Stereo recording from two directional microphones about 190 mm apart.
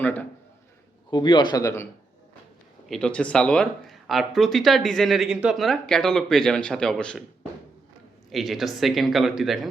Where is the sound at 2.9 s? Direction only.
5° left (ahead or behind).